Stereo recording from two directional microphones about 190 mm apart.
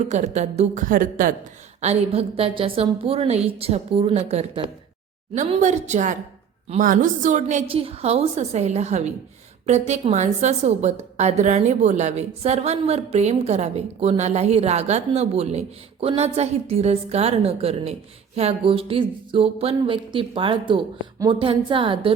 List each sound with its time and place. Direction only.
0.0 s a woman's voice: 40° right (ahead or behind)
1.8 s a woman's voice: 35° right (ahead or behind)
18.3 s a sound: 30° right (ahead or behind)